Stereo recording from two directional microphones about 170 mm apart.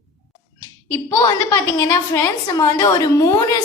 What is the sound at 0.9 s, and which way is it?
A woman's voice, 15° left (ahead or behind).